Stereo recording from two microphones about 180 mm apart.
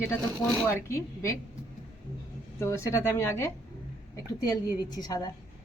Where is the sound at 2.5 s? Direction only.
15° left (ahead or behind).